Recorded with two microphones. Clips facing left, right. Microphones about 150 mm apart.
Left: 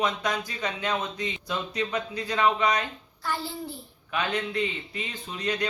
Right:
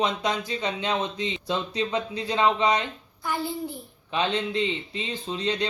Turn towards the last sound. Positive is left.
turn(degrees=-25)  # may be behind; listen again after turning